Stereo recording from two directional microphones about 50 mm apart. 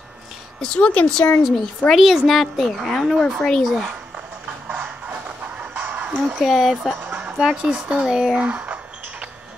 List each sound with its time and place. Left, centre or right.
0.6 s speech: centre
1.4 s a woman's voice: centre
4.7 s music: right
6.3 s a woman's voice: centre
7.0 s music: right
7.3 s speech: centre
8.4 s speech: right